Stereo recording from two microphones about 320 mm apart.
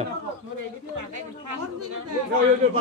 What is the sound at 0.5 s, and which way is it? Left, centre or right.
Speech, right.